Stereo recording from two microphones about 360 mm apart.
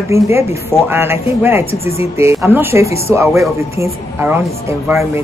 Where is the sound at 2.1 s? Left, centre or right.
Centre.